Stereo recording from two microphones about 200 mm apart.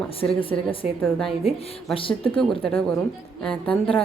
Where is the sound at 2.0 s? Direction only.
25° left (ahead or behind).